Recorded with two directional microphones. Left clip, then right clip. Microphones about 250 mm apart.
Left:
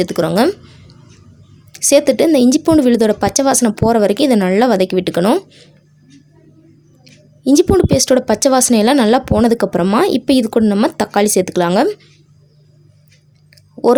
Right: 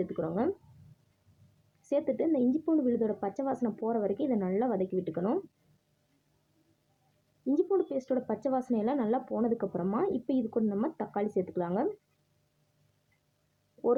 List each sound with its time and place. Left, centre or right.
0.0 s a woman's voice: left
1.9 s a woman's voice: left
7.4 s a woman's voice: left